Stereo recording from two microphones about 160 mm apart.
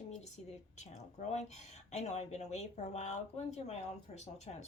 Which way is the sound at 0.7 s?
45° left (ahead or behind).